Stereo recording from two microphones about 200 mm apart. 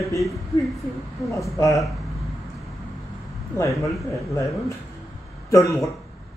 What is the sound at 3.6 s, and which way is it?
Speech, 15° left (ahead or behind).